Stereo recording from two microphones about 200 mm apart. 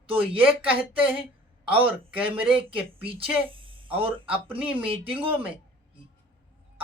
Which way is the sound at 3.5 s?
25° right (ahead or behind).